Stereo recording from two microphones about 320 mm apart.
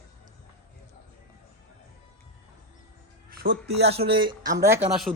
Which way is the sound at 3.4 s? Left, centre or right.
Right.